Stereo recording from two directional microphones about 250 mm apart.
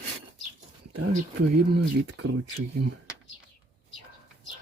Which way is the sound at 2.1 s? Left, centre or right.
Right.